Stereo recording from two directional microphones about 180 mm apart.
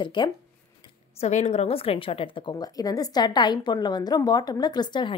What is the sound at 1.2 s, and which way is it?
A woman's voice, 40° left (ahead or behind).